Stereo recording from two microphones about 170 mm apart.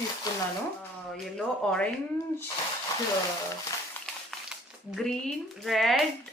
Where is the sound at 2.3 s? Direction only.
20° left (ahead or behind).